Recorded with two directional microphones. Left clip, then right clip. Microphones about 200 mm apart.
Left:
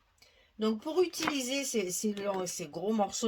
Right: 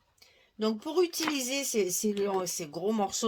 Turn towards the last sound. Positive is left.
turn(degrees=-35)  # may be behind; listen again after turning